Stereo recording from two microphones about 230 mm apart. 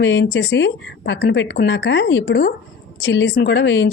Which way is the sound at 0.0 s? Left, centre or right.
Left.